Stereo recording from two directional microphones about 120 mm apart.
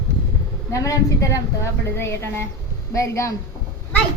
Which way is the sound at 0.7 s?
25° left (ahead or behind).